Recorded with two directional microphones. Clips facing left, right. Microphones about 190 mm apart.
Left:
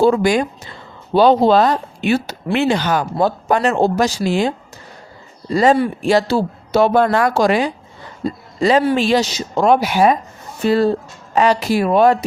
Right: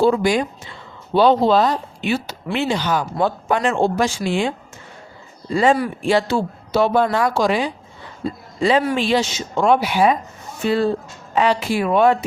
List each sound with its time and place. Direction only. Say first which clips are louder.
0.0 s speech: left 3 dB; 50° left (ahead or behind)
1.5 s speech: left 3 dB; 75° left (ahead or behind)
3.2 s speech: left 4 dB; 40° left (ahead or behind)
6.7 s speech: left 3 dB; 70° left (ahead or behind)
8.2 s speech: left 3 dB; 40° left (ahead or behind)